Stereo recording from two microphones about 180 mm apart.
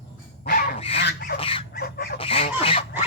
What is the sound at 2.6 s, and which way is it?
Fowl, 30° left (ahead or behind).